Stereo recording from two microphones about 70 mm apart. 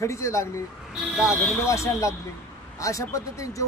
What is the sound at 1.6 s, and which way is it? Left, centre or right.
Speech, left.